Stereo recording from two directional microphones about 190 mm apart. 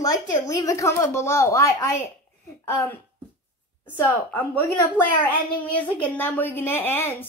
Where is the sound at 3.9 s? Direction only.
10° left (ahead or behind).